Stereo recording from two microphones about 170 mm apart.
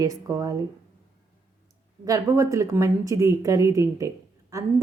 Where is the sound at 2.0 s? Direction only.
20° right (ahead or behind).